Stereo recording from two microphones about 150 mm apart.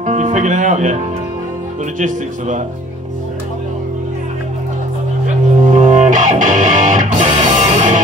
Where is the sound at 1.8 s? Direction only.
60° right (ahead or behind).